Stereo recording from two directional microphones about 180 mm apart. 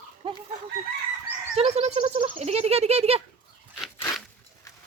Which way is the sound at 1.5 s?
35° right (ahead or behind).